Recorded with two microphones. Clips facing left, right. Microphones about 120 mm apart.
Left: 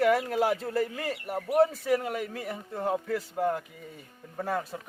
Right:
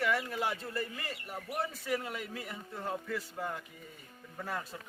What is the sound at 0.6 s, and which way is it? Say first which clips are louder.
Speech: left 9 dB; 90° left.